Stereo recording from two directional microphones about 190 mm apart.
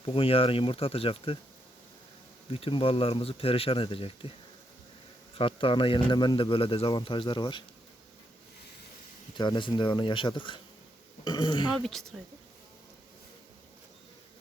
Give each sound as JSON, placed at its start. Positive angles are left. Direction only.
{"t": 0.0, "sound": "speech", "side_deg": 30}
{"t": 2.5, "sound": "speech", "side_deg": 30}
{"t": 5.4, "sound": "speech", "side_deg": 30}
{"t": 9.3, "sound": "speech", "side_deg": 25}
{"t": 11.8, "sound": "speech", "side_deg": 0}